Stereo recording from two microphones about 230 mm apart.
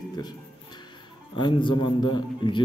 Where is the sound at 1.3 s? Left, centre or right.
Left.